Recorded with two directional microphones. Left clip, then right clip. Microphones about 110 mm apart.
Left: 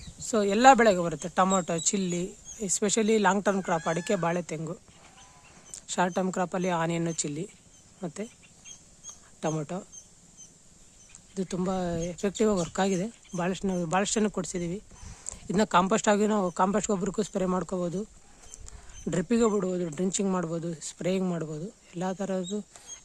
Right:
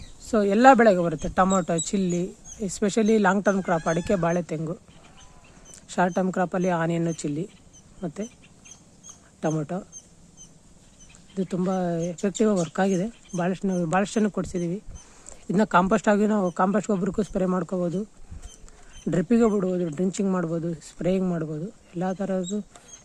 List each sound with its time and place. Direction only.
0.2 s speech: centre (ahead or behind)
3.3 s speech: 10° left (ahead or behind)
5.7 s a sound: centre (ahead or behind)
6.3 s speech: 5° left (ahead or behind)
9.4 s speech: 10° left (ahead or behind)
11.3 s speech: 10° left (ahead or behind)
19.1 s speech: 5° left (ahead or behind)